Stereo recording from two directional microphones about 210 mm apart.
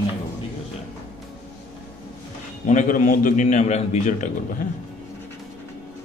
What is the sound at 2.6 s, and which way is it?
A man's voice, 35° left (ahead or behind).